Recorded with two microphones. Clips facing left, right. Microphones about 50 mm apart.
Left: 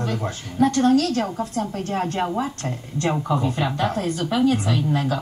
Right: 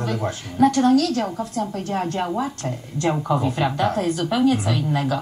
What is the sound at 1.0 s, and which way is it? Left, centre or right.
A woman's voice, left.